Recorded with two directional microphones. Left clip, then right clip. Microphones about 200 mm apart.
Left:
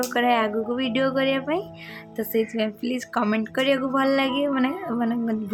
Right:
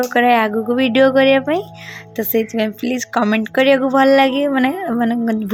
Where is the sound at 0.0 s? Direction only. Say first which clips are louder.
Right 8 dB; 30° right (ahead or behind).